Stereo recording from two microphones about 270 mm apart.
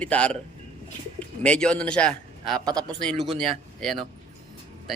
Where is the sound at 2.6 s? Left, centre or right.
Centre.